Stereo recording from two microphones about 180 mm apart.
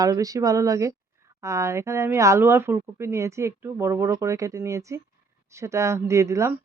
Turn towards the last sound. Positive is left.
turn(degrees=-15)  # may be behind; listen again after turning